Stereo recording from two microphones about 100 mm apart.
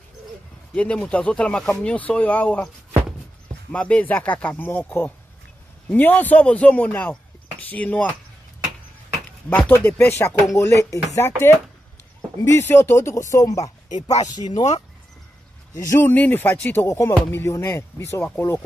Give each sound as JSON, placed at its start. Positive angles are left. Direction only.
{"t": 0.7, "sound": "speech", "side_deg": 10}
{"t": 3.7, "sound": "speech", "side_deg": 15}
{"t": 9.5, "sound": "speech", "side_deg": 20}
{"t": 12.4, "sound": "speech", "side_deg": 25}
{"t": 16.0, "sound": "speech", "side_deg": 20}